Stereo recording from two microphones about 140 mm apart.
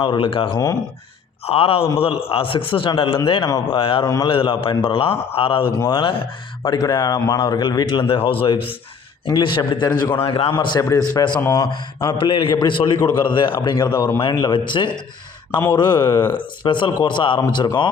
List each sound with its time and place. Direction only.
0.0 s a man's voice: 35° left (ahead or behind)
5.7 s a man's voice: 25° left (ahead or behind)
10.5 s speech: 30° left (ahead or behind)
11.3 s speech: 15° left (ahead or behind)
12.0 s a man's voice: 35° left (ahead or behind)